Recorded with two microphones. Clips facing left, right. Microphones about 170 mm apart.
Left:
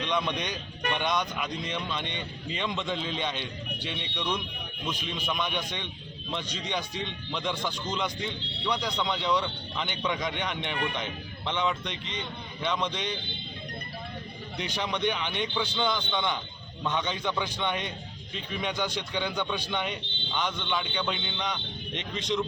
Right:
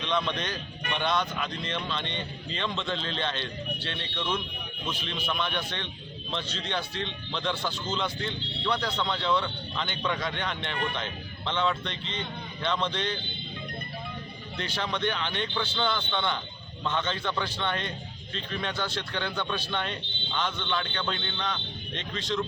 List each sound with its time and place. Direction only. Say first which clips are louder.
0.0 s speech: even; 10° left (ahead or behind)
14.5 s speech: even; 15° left (ahead or behind)